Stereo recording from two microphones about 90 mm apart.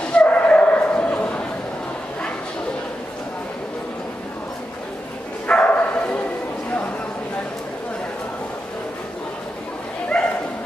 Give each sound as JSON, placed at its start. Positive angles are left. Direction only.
{"t": 0.0, "sound": "bow-wow", "side_deg": 10}
{"t": 5.5, "sound": "bow-wow", "side_deg": 15}
{"t": 10.1, "sound": "bow-wow", "side_deg": 5}